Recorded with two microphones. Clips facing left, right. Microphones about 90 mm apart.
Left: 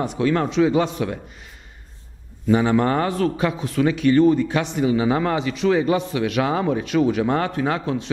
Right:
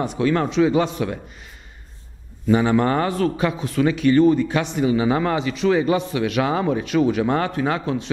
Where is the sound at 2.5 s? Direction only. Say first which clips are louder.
Even; 20° right (ahead or behind).